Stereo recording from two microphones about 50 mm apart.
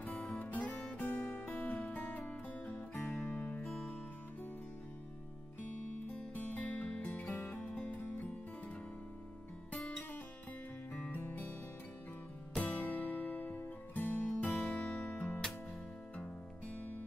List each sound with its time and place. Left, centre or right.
0.0 s music: left
6.3 s music: left
7.2 s music: left
7.6 s music: left
9.8 s music: left
12.7 s music: left
14.5 s music: centre
15.1 s music: left